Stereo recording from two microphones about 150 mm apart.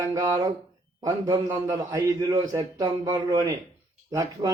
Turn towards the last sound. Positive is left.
turn(degrees=-20)  # may be behind; listen again after turning